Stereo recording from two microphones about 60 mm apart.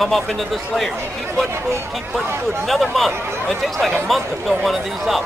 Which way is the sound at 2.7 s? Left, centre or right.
Centre.